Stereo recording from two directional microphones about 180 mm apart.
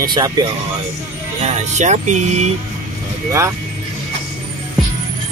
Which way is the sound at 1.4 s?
40° right (ahead or behind).